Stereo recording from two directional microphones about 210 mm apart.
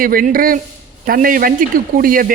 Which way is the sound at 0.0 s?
45° right (ahead or behind).